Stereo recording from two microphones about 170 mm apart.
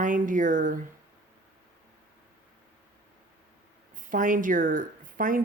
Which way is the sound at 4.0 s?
50° right (ahead or behind).